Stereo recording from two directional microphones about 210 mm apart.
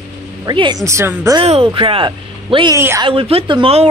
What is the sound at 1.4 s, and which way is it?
Speech, 25° right (ahead or behind).